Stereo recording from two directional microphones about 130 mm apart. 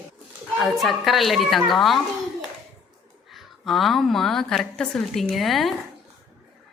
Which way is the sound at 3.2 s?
Centre (ahead or behind).